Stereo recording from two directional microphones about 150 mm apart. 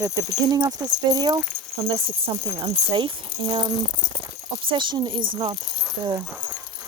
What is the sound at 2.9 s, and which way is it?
Speech, 30° right (ahead or behind).